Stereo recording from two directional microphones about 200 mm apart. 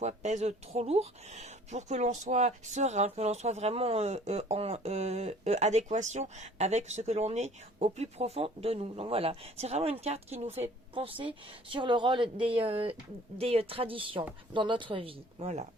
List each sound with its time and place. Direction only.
0.0 s speech: 35° right (ahead or behind)